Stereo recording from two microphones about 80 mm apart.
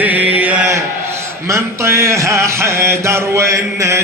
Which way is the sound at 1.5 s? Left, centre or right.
Right.